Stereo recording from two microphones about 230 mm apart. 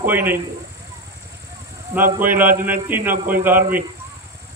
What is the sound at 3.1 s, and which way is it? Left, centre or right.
Speech, right.